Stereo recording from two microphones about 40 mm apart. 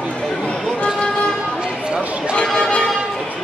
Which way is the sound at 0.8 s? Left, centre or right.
Left.